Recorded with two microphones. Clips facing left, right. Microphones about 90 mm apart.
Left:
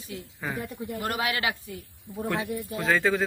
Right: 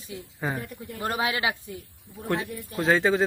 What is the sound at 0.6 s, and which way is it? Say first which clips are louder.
Speech: left 4 dB; 25° left (ahead or behind).